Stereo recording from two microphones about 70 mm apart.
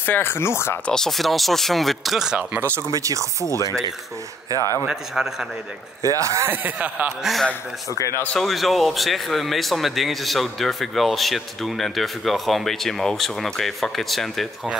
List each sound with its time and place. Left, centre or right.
0.0 s speech: left
0.8 s speech: centre
2.9 s speech: right
4.5 s speech: right
4.8 s a man's voice: centre
6.0 s speech: right
6.5 s speech: right
7.1 s speech: centre